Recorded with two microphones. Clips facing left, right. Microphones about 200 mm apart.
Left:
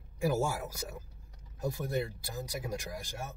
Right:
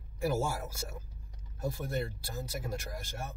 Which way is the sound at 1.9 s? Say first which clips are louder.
Left 1 dB; 15° left (ahead or behind).